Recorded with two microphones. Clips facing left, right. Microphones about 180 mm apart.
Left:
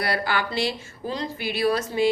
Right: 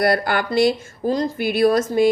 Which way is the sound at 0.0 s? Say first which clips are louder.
Right 7 dB; 50° right (ahead or behind).